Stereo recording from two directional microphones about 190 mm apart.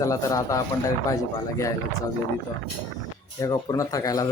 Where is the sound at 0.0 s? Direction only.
15° left (ahead or behind).